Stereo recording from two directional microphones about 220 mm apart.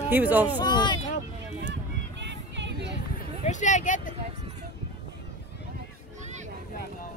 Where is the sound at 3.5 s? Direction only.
35° left (ahead or behind).